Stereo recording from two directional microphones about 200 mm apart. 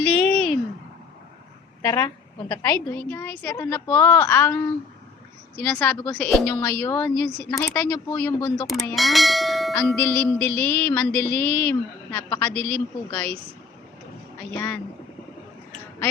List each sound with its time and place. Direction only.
0.0 s a sound: 5° left (ahead or behind)
1.8 s a woman's voice: 15° left (ahead or behind)
3.1 s mantra: 10° left (ahead or behind)
9.0 s bell: centre (ahead or behind)
9.9 s mantra: 10° left (ahead or behind)
14.5 s mantra: 10° left (ahead or behind)